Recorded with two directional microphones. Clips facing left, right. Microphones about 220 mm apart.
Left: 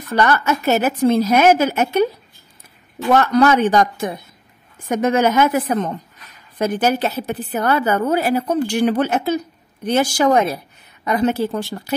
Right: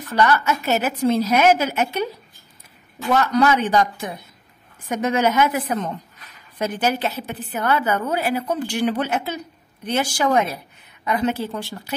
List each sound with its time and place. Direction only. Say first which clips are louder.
0.1 s a woman's voice: left 2 dB; 50° left (ahead or behind)
3.2 s a woman's voice: left 4 dB; 50° left (ahead or behind)